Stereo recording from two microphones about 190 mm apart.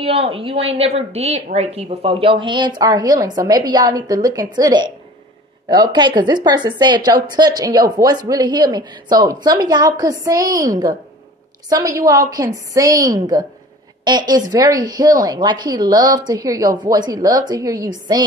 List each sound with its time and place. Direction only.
0.0 s a woman's voice: 30° right (ahead or behind)